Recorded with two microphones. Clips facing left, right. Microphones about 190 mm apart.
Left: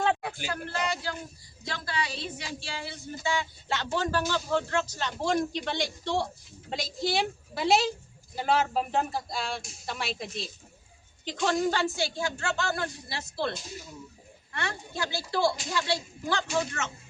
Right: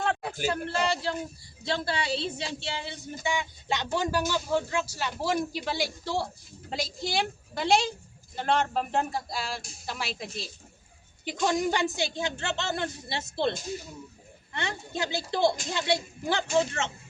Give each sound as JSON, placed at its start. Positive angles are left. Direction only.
{"t": 0.5, "sound": "a woman's voice", "side_deg": -30}
{"t": 11.3, "sound": "speech", "side_deg": -15}
{"t": 14.5, "sound": "speech", "side_deg": -20}